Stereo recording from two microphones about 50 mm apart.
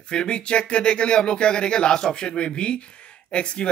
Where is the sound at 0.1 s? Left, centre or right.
Centre.